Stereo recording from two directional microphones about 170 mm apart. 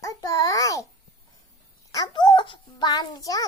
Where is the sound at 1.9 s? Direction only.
25° left (ahead or behind).